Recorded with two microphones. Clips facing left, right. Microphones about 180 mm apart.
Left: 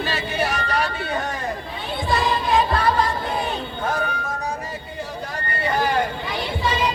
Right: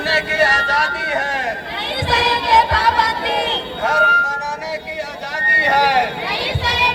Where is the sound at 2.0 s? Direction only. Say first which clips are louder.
Right 2 dB; 85° right.